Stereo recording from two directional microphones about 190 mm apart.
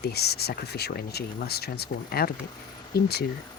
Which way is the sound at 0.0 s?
55° left (ahead or behind).